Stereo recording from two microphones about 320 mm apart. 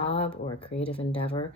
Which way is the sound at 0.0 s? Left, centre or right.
Centre.